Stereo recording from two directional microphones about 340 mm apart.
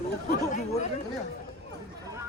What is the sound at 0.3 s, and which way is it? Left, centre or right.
Speech, left.